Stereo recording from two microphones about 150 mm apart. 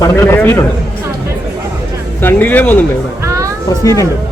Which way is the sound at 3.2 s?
20° right (ahead or behind).